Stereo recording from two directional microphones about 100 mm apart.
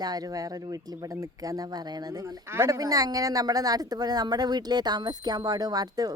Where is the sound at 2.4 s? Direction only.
30° right (ahead or behind).